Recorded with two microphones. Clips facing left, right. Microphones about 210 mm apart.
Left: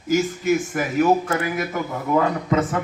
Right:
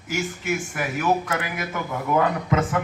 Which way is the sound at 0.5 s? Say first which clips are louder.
Left 6 dB; 40° left (ahead or behind).